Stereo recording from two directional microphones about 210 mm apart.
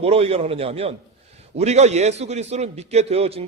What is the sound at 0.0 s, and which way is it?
A man's voice, 30° right (ahead or behind).